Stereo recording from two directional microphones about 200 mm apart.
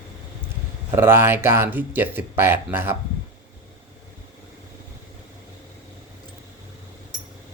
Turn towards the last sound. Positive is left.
turn(degrees=-20)  # may be behind; listen again after turning